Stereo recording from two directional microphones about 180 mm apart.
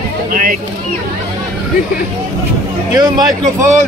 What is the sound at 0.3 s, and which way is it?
Speech, 50° right (ahead or behind).